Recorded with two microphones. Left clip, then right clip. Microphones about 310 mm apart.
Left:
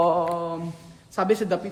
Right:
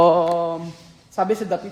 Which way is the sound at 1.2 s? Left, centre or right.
Centre.